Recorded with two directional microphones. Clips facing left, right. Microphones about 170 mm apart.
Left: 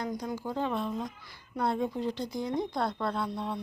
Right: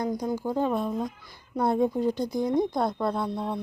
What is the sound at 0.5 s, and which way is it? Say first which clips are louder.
Speech: right 4 dB; 45° right (ahead or behind).